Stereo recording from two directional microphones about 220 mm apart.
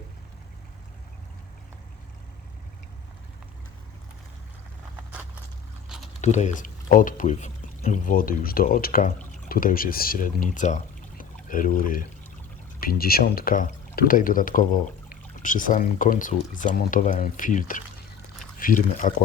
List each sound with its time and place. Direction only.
6.2 s speech: 30° left (ahead or behind)